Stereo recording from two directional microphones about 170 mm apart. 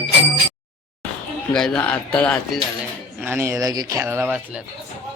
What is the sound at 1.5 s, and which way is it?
Speech, 5° left (ahead or behind).